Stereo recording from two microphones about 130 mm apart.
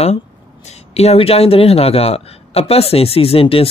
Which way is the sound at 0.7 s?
55° left (ahead or behind).